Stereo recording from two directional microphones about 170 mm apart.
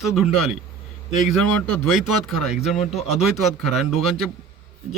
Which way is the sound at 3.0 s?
40° left (ahead or behind).